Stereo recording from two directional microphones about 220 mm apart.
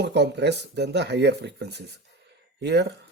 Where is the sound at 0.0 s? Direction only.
50° right (ahead or behind).